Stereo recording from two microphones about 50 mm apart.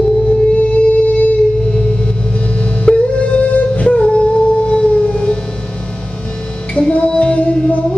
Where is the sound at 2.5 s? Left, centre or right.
Left.